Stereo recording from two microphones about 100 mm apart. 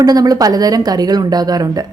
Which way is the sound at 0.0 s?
40° right (ahead or behind).